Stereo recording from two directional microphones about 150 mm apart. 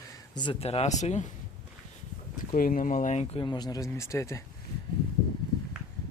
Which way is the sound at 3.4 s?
30° left (ahead or behind).